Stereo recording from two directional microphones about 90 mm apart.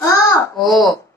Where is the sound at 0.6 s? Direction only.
Centre (ahead or behind).